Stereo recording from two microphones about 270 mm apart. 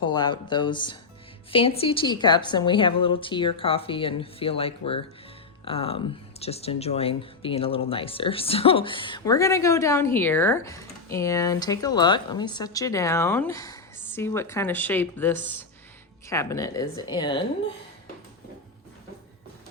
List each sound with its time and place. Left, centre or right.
0.0 s a woman's voice: centre